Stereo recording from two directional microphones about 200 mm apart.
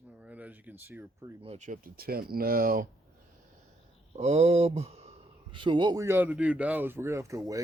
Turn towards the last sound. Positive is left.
turn(degrees=-15)  # may be behind; listen again after turning